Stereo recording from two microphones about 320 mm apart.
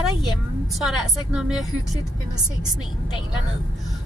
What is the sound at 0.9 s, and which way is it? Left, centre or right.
Speech, centre.